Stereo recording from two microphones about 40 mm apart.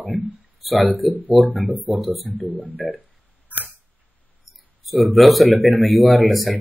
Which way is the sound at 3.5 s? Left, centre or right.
Right.